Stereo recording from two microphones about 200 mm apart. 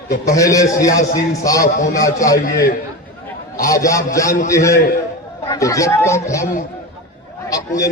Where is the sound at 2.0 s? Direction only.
15° left (ahead or behind).